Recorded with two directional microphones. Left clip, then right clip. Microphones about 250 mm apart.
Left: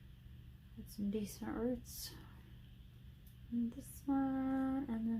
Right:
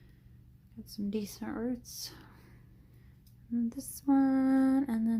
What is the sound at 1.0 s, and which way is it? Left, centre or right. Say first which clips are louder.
Speech: right 5 dB; right.